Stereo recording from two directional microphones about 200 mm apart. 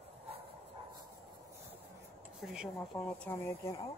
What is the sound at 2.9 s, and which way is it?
Speech, 10° left (ahead or behind).